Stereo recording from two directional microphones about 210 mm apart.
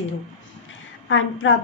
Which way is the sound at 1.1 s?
65° left (ahead or behind).